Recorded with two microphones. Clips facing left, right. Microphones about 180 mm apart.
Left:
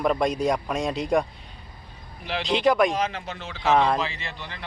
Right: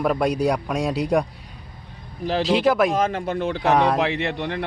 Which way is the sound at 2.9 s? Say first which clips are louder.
Right 6 dB; 50° right (ahead or behind).